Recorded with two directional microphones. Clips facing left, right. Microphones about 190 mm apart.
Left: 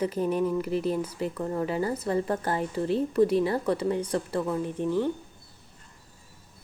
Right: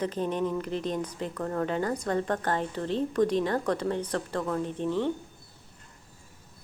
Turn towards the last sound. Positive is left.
turn(degrees=10)  # may be behind; listen again after turning